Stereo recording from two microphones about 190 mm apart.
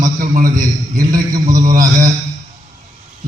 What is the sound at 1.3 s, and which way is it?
Speech, 20° right (ahead or behind).